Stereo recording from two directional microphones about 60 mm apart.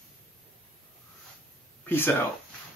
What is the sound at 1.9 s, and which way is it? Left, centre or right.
Speech, left.